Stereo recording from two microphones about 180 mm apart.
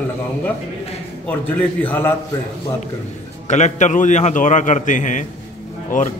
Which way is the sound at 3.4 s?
40° left (ahead or behind).